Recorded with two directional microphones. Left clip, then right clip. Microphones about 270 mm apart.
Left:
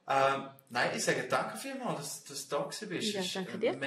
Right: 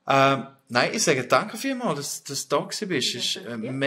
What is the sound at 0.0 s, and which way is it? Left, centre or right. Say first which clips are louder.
Speech: right 9 dB; right.